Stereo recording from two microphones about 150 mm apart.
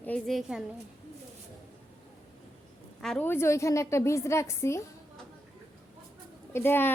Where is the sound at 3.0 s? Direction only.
5° left (ahead or behind).